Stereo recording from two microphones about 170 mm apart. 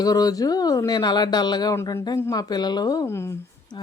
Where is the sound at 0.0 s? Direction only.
20° left (ahead or behind).